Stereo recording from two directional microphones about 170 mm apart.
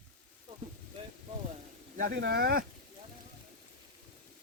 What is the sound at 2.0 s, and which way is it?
Speech, 80° right.